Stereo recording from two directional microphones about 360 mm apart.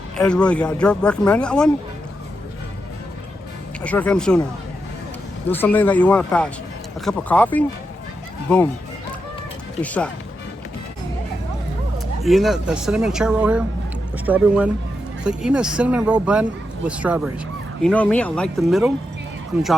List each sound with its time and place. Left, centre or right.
0.2 s speech: centre
3.8 s speech: centre
5.5 s speech: centre
9.8 s speech: centre
12.2 s speech: centre